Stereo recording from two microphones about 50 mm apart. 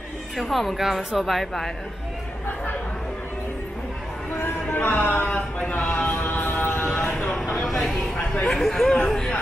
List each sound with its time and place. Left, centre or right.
0.4 s a woman's voice: centre
4.6 s speech: left
5.2 s a sound: left
6.0 s music: left
7.1 s vehicle: centre
7.5 s a sound: centre